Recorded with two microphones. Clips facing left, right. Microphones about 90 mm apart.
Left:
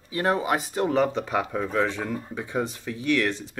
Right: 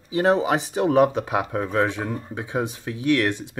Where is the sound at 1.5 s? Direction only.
55° right (ahead or behind).